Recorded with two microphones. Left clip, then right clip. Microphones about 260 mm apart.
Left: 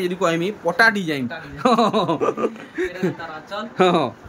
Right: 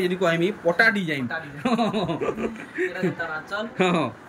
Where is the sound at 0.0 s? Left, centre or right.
Centre.